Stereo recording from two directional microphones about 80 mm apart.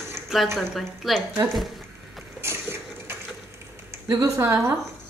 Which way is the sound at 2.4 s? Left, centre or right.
Right.